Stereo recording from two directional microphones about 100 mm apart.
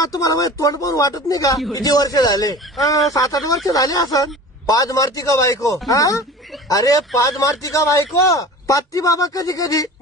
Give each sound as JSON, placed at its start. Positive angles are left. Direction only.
{"t": 0.0, "sound": "a man's voice", "side_deg": 35}